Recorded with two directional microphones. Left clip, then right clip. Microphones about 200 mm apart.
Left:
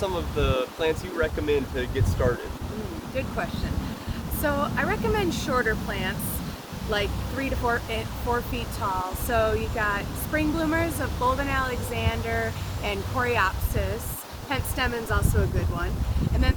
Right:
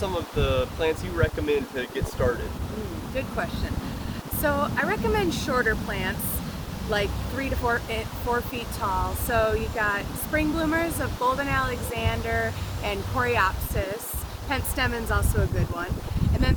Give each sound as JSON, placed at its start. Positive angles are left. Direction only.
{"t": 0.0, "sound": "speech", "side_deg": 10}
{"t": 3.2, "sound": "speech", "side_deg": -15}